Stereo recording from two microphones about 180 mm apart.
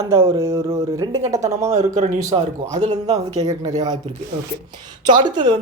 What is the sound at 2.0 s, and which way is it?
Speech, 45° right (ahead or behind).